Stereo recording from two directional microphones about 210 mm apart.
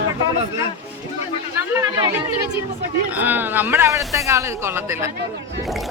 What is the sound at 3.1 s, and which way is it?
Speech, 10° right (ahead or behind).